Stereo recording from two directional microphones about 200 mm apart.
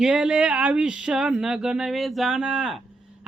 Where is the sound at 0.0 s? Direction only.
5° right (ahead or behind).